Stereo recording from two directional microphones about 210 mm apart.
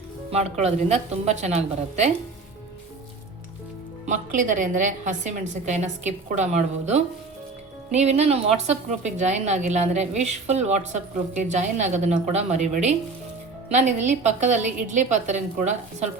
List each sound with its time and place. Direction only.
0.3 s a woman's voice: 30° right (ahead or behind)
4.0 s a woman's voice: 35° right (ahead or behind)